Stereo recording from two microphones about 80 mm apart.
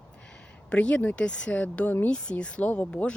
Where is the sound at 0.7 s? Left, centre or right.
Centre.